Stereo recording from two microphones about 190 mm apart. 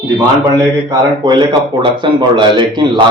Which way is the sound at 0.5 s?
20° right (ahead or behind).